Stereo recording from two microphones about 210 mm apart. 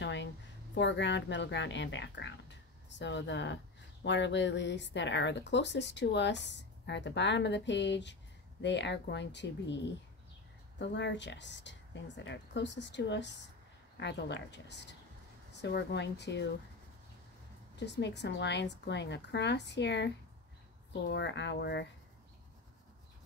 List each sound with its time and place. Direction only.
0.0 s a sound: 60° left (ahead or behind)
0.7 s speech: 60° left (ahead or behind)
10.8 s speech: 55° left (ahead or behind)
17.7 s speech: 55° left (ahead or behind)